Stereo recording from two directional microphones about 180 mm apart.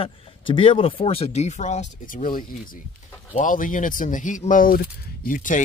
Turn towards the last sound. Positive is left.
turn(degrees=45)  # may be behind; listen again after turning